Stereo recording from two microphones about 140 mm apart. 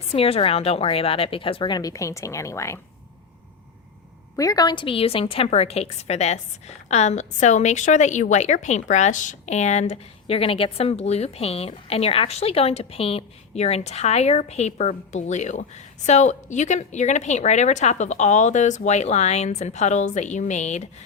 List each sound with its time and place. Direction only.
0.1 s a woman's voice: 45° left (ahead or behind); by 2.8 s 20° left (ahead or behind)
4.4 s a woman's voice: 25° left (ahead or behind); by 20.9 s 55° left (ahead or behind)